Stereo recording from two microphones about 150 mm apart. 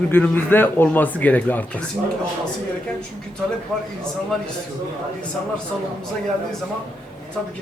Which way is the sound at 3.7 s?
5° left (ahead or behind).